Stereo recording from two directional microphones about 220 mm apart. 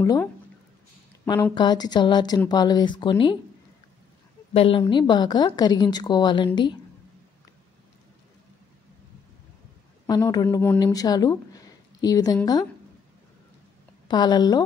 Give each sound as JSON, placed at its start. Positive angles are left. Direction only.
{"t": 0.0, "sound": "speech", "side_deg": 15}
{"t": 4.6, "sound": "speech", "side_deg": 25}
{"t": 10.0, "sound": "speech", "side_deg": 15}
{"t": 14.0, "sound": "speech", "side_deg": 20}